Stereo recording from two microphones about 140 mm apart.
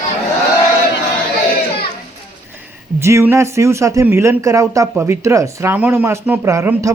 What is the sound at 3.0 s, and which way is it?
Speech, 20° right (ahead or behind).